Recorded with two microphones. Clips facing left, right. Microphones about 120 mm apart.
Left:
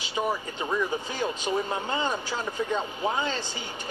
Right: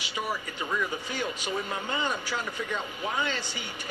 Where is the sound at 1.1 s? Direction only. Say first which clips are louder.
Left 4 dB; 25° left (ahead or behind).